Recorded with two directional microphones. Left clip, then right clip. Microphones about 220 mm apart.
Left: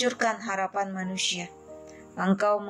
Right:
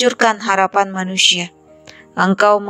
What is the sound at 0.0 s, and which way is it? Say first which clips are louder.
A woman's voice: right 12 dB; 40° right (ahead or behind).